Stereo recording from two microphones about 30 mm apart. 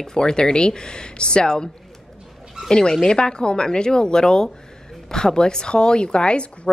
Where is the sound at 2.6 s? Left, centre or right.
Left.